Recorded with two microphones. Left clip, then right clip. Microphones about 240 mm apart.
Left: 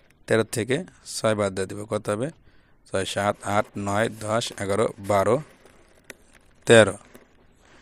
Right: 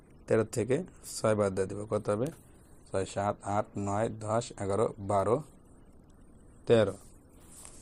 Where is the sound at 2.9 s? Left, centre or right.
Left.